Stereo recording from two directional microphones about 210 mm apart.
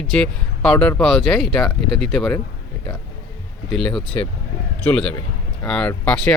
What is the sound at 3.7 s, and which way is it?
Speech, centre (ahead or behind).